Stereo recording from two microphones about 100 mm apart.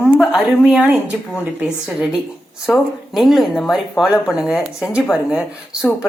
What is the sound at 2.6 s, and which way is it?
A woman's voice, 5° right (ahead or behind).